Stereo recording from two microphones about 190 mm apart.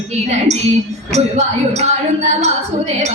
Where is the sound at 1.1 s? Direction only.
35° right (ahead or behind).